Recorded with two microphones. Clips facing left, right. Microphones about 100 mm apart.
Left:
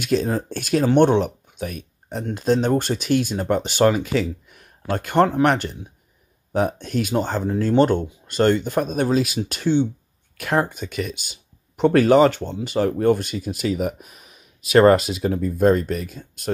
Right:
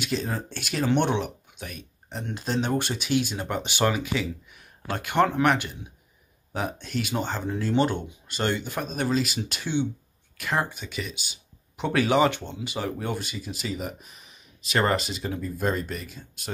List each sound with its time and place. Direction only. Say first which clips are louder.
0.0 s speech: left 8 dB; 45° left (ahead or behind)